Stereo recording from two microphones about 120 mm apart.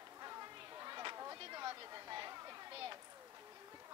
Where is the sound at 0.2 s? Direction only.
30° right (ahead or behind).